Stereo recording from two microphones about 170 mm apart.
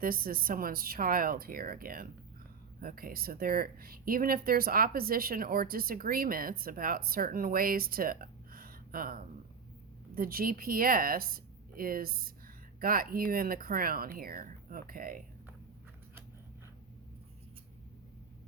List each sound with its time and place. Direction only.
0.0 s speech: 60° right (ahead or behind)